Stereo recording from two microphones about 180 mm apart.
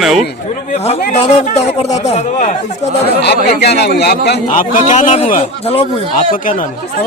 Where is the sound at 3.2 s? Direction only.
65° left (ahead or behind).